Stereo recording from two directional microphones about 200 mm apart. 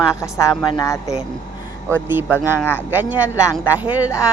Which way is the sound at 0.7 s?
20° left (ahead or behind).